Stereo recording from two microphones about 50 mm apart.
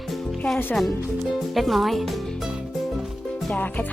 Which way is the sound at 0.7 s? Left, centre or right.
Centre.